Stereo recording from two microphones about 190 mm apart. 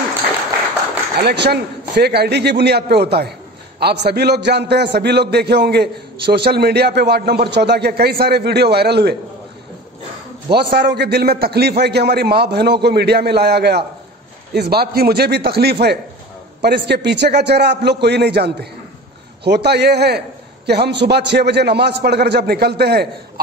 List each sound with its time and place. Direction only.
1.2 s a man's voice: 60° right (ahead or behind)
10.7 s a man's voice: 55° right (ahead or behind)